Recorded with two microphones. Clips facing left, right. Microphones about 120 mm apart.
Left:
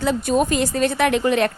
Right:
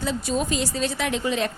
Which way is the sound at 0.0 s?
55° left (ahead or behind).